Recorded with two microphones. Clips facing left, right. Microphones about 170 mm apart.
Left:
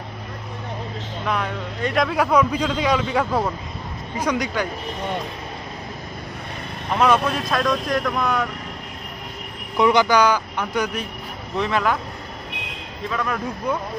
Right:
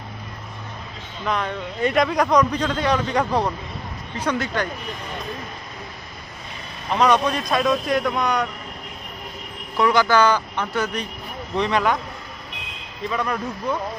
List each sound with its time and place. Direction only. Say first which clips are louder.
1.2 s a man's voice: right 1 dB; 5° left (ahead or behind)
7.0 s a man's voice: even; 5° left (ahead or behind)
9.8 s a man's voice: left 1 dB; 20° left (ahead or behind); by 12.0 s centre (ahead or behind)
13.1 s a man's voice: right 1 dB; centre (ahead or behind)